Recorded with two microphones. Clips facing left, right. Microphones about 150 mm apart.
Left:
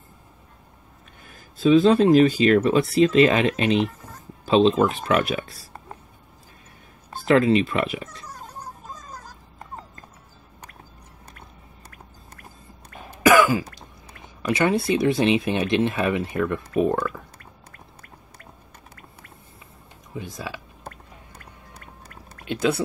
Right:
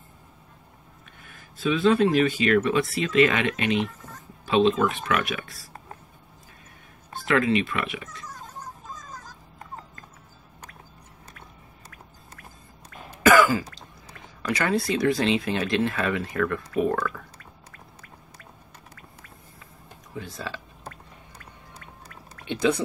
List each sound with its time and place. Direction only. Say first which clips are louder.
1.2 s speech: left 7 dB; 35° left (ahead or behind)
7.1 s speech: left 5 dB; 35° left (ahead or behind)
13.2 s speech: left 1 dB; 15° left (ahead or behind)
20.2 s speech: left 2 dB; 15° left (ahead or behind)
22.5 s speech: even; 5° left (ahead or behind)